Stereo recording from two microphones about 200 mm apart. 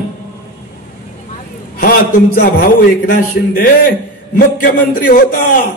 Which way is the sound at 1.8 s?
45° left (ahead or behind).